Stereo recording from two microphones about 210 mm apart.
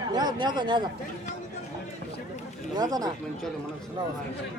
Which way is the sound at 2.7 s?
20° right (ahead or behind).